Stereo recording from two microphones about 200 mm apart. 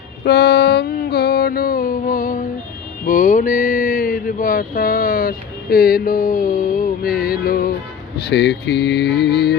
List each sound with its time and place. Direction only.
0.3 s mantra: 55° left (ahead or behind)
3.1 s a sound: 40° left (ahead or behind)
8.3 s mantra: 60° left (ahead or behind)